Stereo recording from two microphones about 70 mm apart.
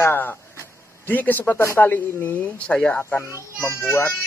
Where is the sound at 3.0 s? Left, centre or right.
Left.